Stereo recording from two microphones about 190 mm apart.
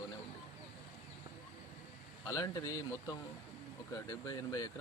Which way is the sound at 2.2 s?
20° left (ahead or behind).